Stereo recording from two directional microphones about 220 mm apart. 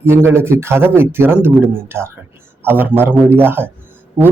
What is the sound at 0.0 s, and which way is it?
A man's voice, 10° right (ahead or behind).